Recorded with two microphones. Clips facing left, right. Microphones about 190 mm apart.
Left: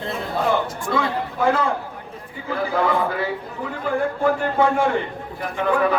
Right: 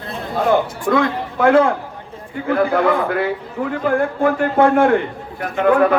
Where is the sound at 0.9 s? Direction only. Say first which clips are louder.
Right 6 dB; 65° right (ahead or behind).